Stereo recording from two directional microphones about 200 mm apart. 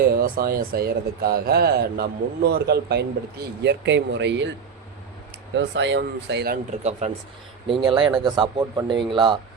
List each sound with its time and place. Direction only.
0.2 s speech: 50° right (ahead or behind)
5.5 s speech: 65° right (ahead or behind)
6.7 s speech: 35° right (ahead or behind)
7.7 s speech: 25° right (ahead or behind)